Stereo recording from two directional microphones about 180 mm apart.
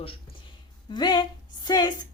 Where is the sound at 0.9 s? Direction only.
25° left (ahead or behind).